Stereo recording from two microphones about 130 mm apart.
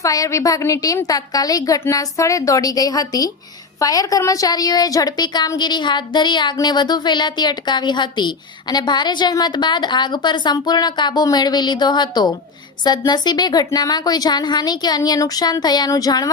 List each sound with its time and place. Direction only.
0.0 s a woman's voice: 25° left (ahead or behind)